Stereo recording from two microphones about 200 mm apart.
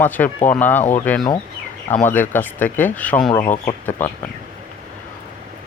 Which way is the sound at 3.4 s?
40° left (ahead or behind).